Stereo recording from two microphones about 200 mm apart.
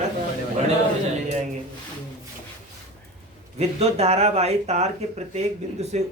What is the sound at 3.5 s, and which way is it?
Speech, 30° right (ahead or behind).